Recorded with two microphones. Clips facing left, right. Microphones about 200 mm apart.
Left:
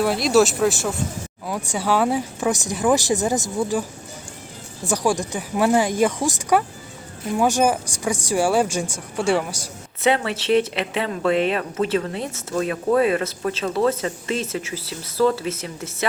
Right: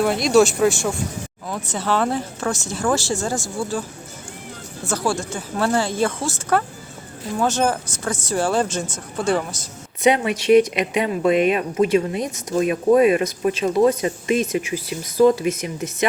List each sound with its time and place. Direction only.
0.0 s speech: centre (ahead or behind)
4.9 s speech: 15° left (ahead or behind)
10.0 s speech: 15° right (ahead or behind)